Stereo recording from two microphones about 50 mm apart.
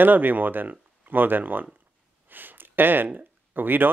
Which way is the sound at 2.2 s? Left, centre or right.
Right.